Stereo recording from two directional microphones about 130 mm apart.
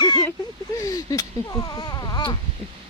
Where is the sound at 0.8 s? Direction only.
30° left (ahead or behind).